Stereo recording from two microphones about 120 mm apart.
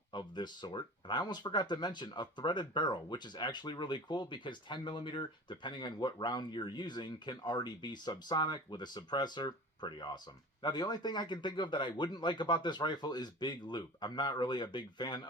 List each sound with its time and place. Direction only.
0.1 s speech: 40° left (ahead or behind)